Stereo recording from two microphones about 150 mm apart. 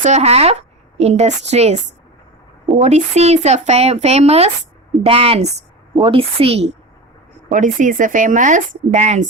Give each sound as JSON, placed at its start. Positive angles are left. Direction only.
{"t": 0.0, "sound": "speech", "side_deg": -45}
{"t": 2.8, "sound": "a woman's voice", "side_deg": -45}
{"t": 7.5, "sound": "speech", "side_deg": -60}